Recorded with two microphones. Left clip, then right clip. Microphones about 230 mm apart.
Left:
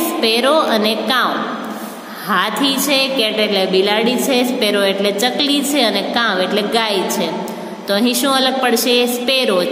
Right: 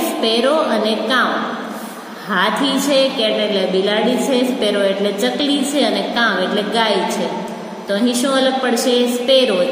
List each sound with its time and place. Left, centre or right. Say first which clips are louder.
0.0 s a woman's voice: left 1 dB; left
2.3 s a woman's voice: even; left